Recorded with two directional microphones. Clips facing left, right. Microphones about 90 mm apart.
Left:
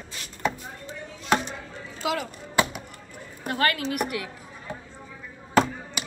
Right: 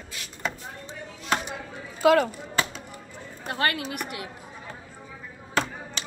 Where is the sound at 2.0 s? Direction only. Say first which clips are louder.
Right 9 dB; 50° right (ahead or behind).